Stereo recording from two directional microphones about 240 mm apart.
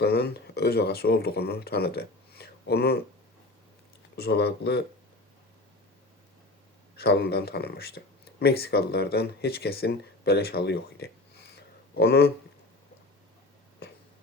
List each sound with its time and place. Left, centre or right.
0.0 s speech: left
4.2 s speech: left
6.9 s speech: left